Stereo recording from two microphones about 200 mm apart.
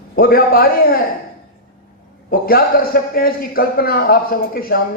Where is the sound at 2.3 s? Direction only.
45° left (ahead or behind).